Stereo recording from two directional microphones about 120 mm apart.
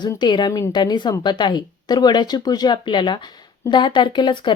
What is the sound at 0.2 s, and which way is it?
Speech, 35° left (ahead or behind).